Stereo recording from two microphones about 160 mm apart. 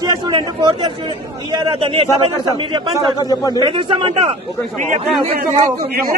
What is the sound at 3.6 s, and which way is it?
Speech, 30° right (ahead or behind).